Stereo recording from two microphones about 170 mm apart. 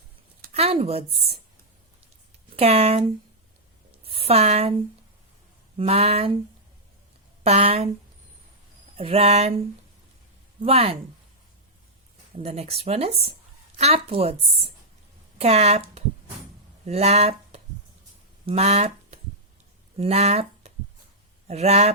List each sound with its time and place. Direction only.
0.5 s a woman's voice: 35° right (ahead or behind)
2.6 s a woman's voice: 40° right (ahead or behind)
5.7 s speech: 35° right (ahead or behind)
7.4 s speech: 40° right (ahead or behind)
9.0 s speech: 35° right (ahead or behind)
10.6 s speech: 35° right (ahead or behind)
12.3 s speech: 35° right (ahead or behind)